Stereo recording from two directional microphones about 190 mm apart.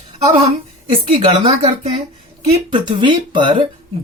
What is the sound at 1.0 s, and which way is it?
Speech, 30° right (ahead or behind).